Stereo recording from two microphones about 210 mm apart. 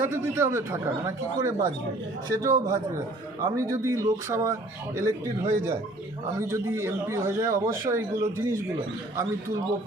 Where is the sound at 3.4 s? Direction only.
15° right (ahead or behind).